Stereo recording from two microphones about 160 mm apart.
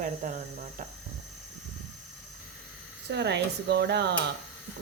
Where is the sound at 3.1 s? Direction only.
90° right.